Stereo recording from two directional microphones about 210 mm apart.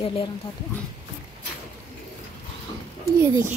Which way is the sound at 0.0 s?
25° left (ahead or behind).